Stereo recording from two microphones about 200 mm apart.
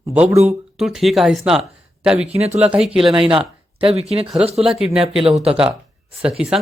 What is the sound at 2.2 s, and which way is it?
Speech, 30° right (ahead or behind).